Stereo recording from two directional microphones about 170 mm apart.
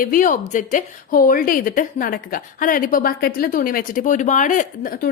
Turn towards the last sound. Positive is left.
turn(degrees=55)  # may be behind; listen again after turning